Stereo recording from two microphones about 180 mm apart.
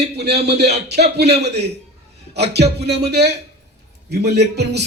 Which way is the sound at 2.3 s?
65° right (ahead or behind).